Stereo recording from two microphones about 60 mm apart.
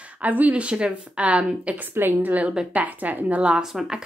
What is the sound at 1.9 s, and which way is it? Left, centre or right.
A woman's voice, right.